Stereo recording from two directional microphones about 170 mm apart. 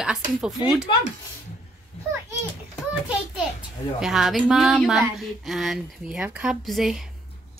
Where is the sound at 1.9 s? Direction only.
40° left (ahead or behind).